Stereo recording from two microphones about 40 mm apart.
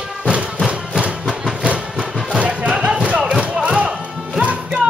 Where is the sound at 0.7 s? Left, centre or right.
Right.